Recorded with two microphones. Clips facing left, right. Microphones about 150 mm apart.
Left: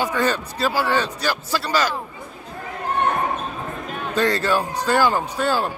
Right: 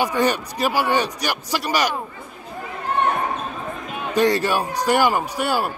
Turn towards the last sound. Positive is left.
turn(degrees=-10)  # may be behind; listen again after turning